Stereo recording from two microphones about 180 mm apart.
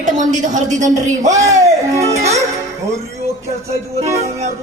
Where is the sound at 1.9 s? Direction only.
15° right (ahead or behind).